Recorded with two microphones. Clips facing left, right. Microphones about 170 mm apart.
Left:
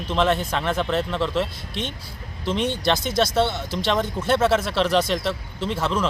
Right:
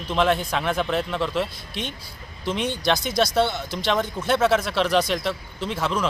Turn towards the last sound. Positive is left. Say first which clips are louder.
# left 1 dB
turn(degrees=0)  # may be behind; listen again after turning